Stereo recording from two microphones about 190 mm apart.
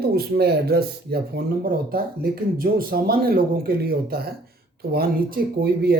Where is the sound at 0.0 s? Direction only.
55° right (ahead or behind).